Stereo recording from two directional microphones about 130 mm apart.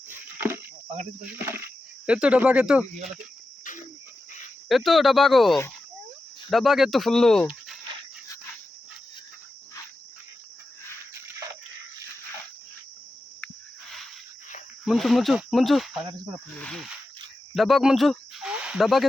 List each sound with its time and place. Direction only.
0.1 s a sound: 15° right (ahead or behind)
1.5 s speech: 15° right (ahead or behind)
3.6 s cricket: 85° left
4.7 s speech: centre (ahead or behind)
14.8 s speech: centre (ahead or behind)
16.6 s cricket: 10° left (ahead or behind)
17.5 s speech: centre (ahead or behind)